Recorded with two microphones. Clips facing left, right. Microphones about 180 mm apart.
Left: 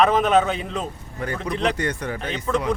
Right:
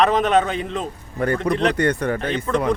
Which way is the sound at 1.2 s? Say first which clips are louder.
Right 5 dB; 55° right (ahead or behind).